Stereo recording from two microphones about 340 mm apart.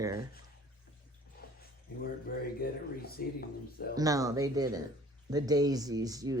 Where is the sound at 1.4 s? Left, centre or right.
Left.